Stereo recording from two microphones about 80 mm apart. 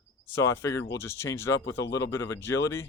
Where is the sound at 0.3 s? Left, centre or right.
Left.